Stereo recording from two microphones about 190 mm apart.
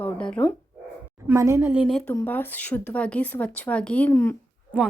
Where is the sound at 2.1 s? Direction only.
10° left (ahead or behind).